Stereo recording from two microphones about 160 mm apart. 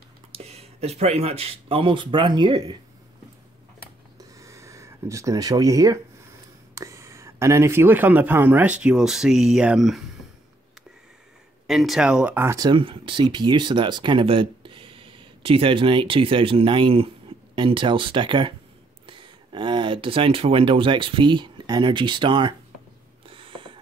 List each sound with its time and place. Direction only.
0.3 s speech: 40° right (ahead or behind)
4.2 s a sound: 20° right (ahead or behind)
6.7 s speech: 20° right (ahead or behind); by 10.0 s centre (ahead or behind)
11.6 s speech: centre (ahead or behind)
12.5 s speech: 30° right (ahead or behind)
23.2 s a sound: 35° right (ahead or behind)